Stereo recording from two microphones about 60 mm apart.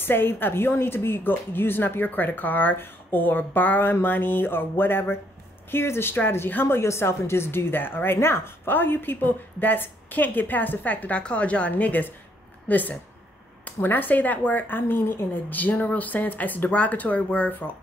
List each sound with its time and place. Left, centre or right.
0.0 s a woman's voice: left